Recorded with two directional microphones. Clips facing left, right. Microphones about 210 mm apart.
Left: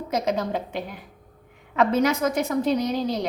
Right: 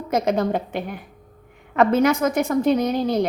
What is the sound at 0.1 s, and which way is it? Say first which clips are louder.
A woman's voice: right 5 dB; 55° right (ahead or behind).